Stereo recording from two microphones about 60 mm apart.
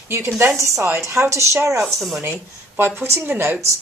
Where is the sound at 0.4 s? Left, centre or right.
Right.